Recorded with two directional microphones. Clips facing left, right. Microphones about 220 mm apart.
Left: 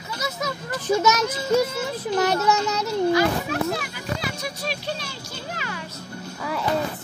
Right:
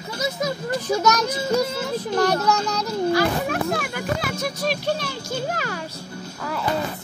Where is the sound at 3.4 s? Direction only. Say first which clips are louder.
Right 2 dB; 55° right (ahead or behind).